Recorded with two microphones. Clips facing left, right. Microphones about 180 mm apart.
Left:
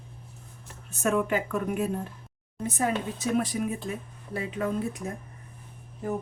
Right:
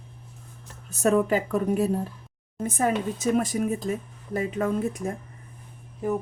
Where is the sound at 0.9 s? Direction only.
40° right (ahead or behind).